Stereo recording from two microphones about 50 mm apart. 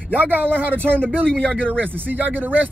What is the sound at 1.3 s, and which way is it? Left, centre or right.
Speech, left.